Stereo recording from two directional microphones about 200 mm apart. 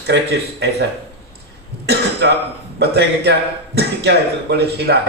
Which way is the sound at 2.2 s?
60° right (ahead or behind).